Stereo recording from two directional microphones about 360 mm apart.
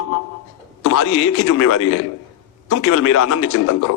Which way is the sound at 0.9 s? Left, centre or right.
Left.